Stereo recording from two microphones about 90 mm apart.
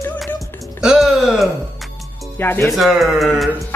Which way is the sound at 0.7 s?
5° right (ahead or behind).